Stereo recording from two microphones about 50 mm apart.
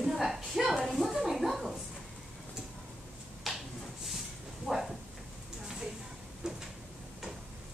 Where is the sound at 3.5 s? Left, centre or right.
Centre.